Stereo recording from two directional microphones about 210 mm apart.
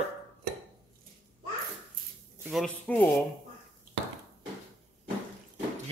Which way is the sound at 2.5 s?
5° left (ahead or behind).